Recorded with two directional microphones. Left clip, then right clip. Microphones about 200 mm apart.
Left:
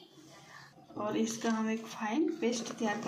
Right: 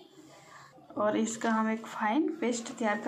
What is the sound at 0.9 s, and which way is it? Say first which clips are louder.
A woman's voice: right 5 dB; 20° right (ahead or behind).